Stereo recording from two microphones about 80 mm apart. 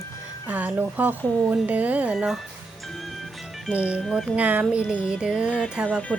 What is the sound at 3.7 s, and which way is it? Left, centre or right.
Music, centre.